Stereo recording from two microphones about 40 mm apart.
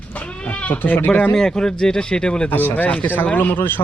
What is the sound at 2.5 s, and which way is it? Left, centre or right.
Speech, left.